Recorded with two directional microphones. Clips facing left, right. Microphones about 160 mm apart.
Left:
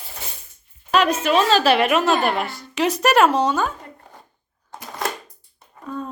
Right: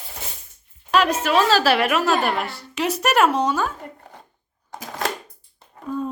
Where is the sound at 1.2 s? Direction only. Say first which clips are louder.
Left 1 dB; 20° left (ahead or behind).